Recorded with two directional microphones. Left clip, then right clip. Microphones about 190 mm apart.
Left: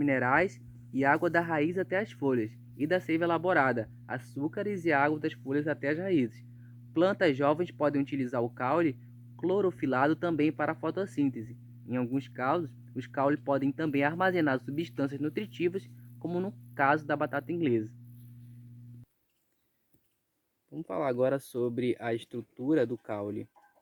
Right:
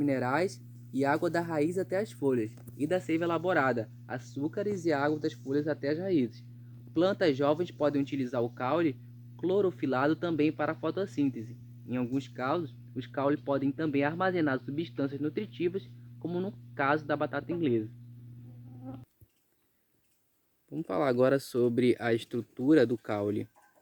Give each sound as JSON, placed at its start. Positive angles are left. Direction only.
{"t": 0.0, "sound": "speech", "side_deg": 25}
{"t": 2.2, "sound": "speech", "side_deg": 40}
{"t": 4.7, "sound": "speech", "side_deg": 25}
{"t": 5.5, "sound": "speech", "side_deg": 45}
{"t": 5.8, "sound": "speech", "side_deg": 30}
{"t": 6.1, "sound": "speech", "side_deg": 50}
{"t": 14.9, "sound": "speech", "side_deg": 55}
{"t": 20.7, "sound": "speech", "side_deg": -40}